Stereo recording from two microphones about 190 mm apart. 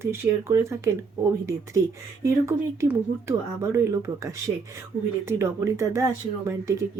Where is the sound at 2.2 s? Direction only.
15° right (ahead or behind).